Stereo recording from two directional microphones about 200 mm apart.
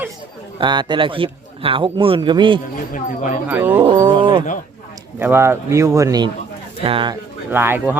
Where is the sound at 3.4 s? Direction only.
10° right (ahead or behind).